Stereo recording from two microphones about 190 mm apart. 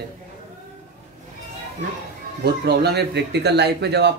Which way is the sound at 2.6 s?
60° right (ahead or behind).